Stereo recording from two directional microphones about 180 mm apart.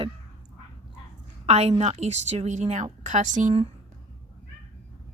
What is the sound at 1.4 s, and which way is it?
A woman's voice, 35° right (ahead or behind).